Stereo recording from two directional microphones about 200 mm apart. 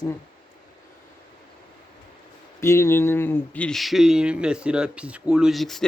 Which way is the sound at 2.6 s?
15° left (ahead or behind).